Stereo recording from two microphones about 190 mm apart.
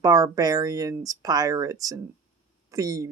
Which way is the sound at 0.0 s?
20° right (ahead or behind).